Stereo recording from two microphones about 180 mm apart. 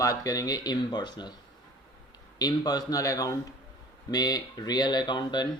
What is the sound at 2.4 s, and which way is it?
Speech, 20° left (ahead or behind).